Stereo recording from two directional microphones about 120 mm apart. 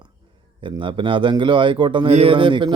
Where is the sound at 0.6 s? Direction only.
45° right (ahead or behind).